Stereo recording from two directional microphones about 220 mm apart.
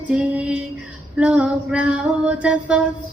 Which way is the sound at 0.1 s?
5° right (ahead or behind).